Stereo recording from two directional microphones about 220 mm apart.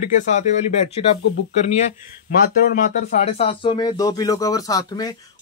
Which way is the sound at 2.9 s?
30° left (ahead or behind).